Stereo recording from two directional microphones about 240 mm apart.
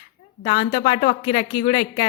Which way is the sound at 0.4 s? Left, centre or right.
Left.